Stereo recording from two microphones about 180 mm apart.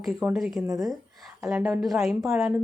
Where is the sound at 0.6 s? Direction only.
20° right (ahead or behind).